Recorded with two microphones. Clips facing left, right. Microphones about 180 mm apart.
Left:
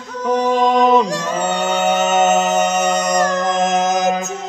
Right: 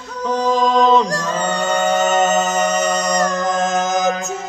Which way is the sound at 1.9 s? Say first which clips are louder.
Left 2 dB; 25° left (ahead or behind).